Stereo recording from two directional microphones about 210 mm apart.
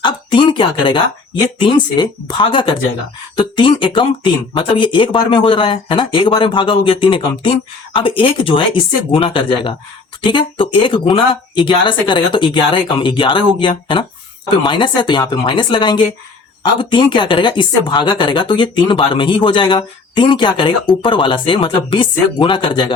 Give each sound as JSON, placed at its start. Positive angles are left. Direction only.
{"t": 0.0, "sound": "a woman's voice", "side_deg": 20}